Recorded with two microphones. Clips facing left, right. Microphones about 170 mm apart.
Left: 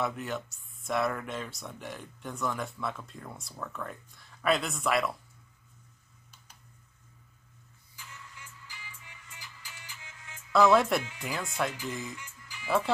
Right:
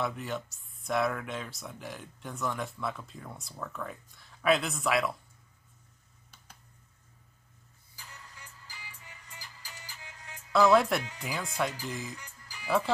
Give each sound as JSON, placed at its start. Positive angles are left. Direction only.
{"t": 0.0, "sound": "speech", "side_deg": 0}
{"t": 7.9, "sound": "music", "side_deg": -35}
{"t": 10.5, "sound": "speech", "side_deg": 0}
{"t": 12.2, "sound": "music", "side_deg": -35}
{"t": 12.6, "sound": "speech", "side_deg": 0}